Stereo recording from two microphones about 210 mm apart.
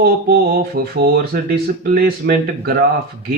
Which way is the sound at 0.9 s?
50° right (ahead or behind).